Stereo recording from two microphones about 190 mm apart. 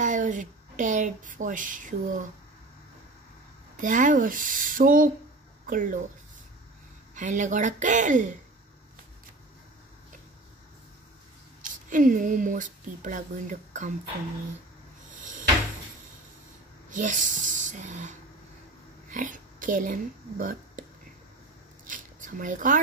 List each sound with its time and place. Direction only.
0.0 s a sound: 40° right (ahead or behind)
3.7 s speech: 45° right (ahead or behind)
7.2 s a woman's voice: 40° right (ahead or behind)
11.6 s a woman's voice: 45° right (ahead or behind)
16.9 s speech: 45° right (ahead or behind)
21.8 s a sound: 45° right (ahead or behind)